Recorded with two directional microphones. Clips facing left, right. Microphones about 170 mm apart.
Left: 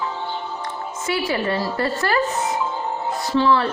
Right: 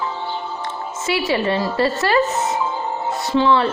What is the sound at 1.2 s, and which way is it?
Speech, 25° right (ahead or behind).